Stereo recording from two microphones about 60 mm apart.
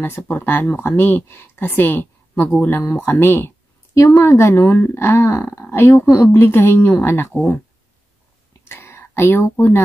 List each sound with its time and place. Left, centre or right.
0.3 s speech: left
3.9 s speech: left
4.7 s speech: left
8.6 s a sound: left